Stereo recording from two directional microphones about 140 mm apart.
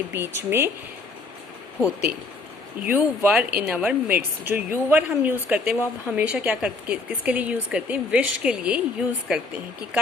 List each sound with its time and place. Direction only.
0.1 s a woman's voice: 15° right (ahead or behind)
2.8 s a woman's voice: 15° right (ahead or behind)